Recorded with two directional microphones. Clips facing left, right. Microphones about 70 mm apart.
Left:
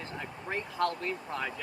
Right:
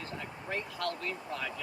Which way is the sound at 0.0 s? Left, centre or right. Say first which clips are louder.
Left 1 dB; left.